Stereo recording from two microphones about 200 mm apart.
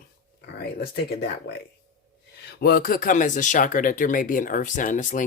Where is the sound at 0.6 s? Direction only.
55° left (ahead or behind).